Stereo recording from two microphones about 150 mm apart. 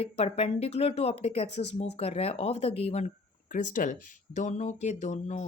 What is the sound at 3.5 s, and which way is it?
Speech, 60° left (ahead or behind).